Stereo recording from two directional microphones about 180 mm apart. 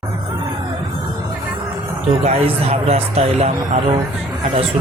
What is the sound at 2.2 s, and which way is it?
Speech, 35° right (ahead or behind).